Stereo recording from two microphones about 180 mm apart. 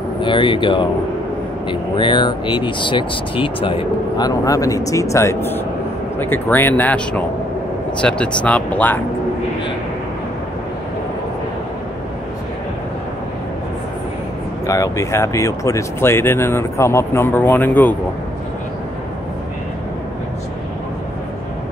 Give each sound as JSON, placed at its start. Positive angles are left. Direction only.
{"t": 0.2, "sound": "speech", "side_deg": 25}
{"t": 14.7, "sound": "speech", "side_deg": 15}